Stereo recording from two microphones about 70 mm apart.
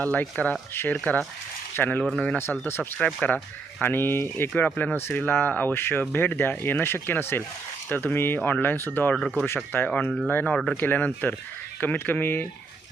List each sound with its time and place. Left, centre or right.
0.0 s speech: left
0.7 s speech: left
2.0 s speech: centre
2.4 s speech: left
3.2 s speech: left
3.9 s speech: left
4.5 s speech: left
4.9 s speech: left